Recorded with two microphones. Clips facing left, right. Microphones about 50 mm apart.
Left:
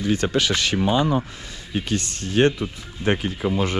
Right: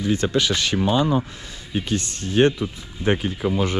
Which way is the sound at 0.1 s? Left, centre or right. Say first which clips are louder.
Even; left.